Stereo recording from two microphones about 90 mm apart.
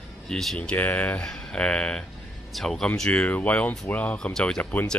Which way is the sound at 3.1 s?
15° left (ahead or behind).